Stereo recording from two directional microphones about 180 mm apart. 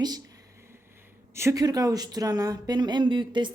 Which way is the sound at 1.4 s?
20° right (ahead or behind).